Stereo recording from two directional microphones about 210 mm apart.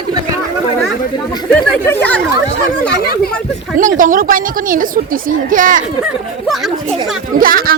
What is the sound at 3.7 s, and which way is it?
A woman's voice, 40° right (ahead or behind).